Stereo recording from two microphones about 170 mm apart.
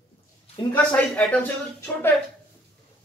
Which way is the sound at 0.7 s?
5° left (ahead or behind).